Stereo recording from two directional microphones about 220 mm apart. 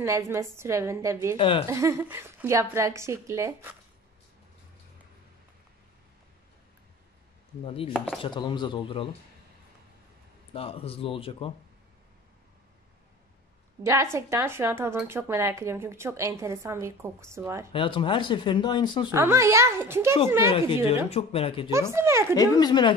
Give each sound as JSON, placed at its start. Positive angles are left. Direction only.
{"t": 0.0, "sound": "speech", "side_deg": -15}
{"t": 1.3, "sound": "speech", "side_deg": 20}
{"t": 1.7, "sound": "speech", "side_deg": -15}
{"t": 7.6, "sound": "speech", "side_deg": 25}
{"t": 7.9, "sound": "chopping", "side_deg": 0}
{"t": 8.2, "sound": "speech", "side_deg": 20}
{"t": 10.5, "sound": "speech", "side_deg": 25}
{"t": 14.1, "sound": "speech", "side_deg": -10}
{"t": 17.7, "sound": "speech", "side_deg": 20}
{"t": 19.1, "sound": "speech", "side_deg": -15}
{"t": 20.5, "sound": "speech", "side_deg": 25}
{"t": 21.9, "sound": "speech", "side_deg": -10}
{"t": 22.3, "sound": "speech", "side_deg": 15}